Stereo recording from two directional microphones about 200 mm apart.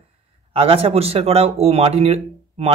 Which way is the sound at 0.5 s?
30° right (ahead or behind).